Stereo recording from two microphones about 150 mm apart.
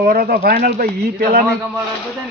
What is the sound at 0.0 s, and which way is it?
Speech, 90° right.